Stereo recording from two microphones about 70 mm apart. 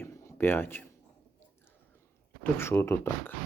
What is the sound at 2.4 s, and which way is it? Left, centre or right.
Speech, left.